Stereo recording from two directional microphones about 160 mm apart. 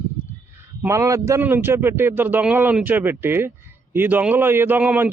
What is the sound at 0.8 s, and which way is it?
Speech, 20° right (ahead or behind).